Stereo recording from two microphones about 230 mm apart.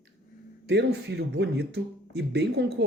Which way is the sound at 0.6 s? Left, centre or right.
Right.